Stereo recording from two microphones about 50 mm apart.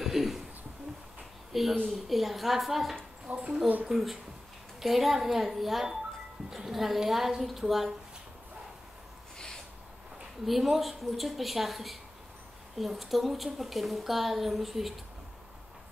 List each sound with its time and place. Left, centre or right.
0.0 s a sound: centre
1.5 s a child's voice: centre
3.3 s a woman's voice: centre
3.6 s speech: right
3.9 s a woman's voice: centre
10.4 s a woman's voice: centre